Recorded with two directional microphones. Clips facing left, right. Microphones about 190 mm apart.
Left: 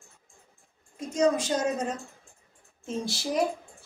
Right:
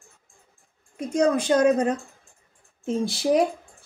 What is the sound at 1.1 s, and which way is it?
A woman's voice, 60° right (ahead or behind).